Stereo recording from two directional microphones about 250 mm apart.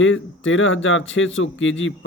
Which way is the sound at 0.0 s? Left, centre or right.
Left.